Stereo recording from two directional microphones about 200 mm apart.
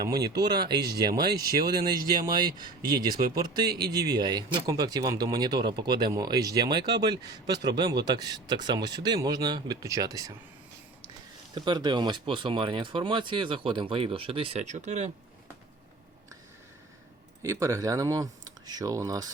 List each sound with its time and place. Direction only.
0.1 s speech: 20° right (ahead or behind)
11.5 s speech: 20° right (ahead or behind)
17.4 s speech: 15° right (ahead or behind)